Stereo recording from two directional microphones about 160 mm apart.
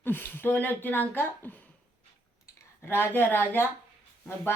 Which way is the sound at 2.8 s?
15° left (ahead or behind).